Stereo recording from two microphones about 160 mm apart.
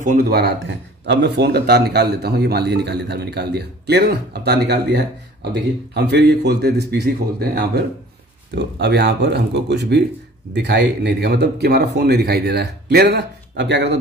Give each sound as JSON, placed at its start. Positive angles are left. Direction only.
{"t": 0.0, "sound": "speech", "side_deg": -55}
{"t": 0.3, "sound": "speech", "side_deg": -80}
{"t": 1.0, "sound": "a man's voice", "side_deg": -90}